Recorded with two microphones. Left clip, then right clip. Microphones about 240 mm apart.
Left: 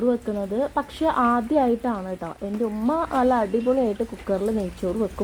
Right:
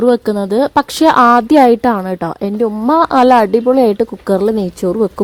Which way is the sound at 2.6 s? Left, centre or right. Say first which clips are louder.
Right 13 dB; right.